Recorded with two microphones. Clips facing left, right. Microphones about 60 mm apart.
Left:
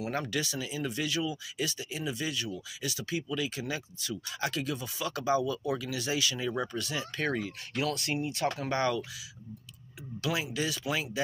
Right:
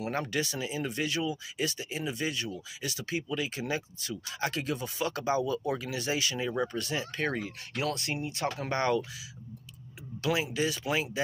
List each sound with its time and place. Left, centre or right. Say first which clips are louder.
0.1 s speech: right 2 dB; right
10.2 s speech: right 3 dB; right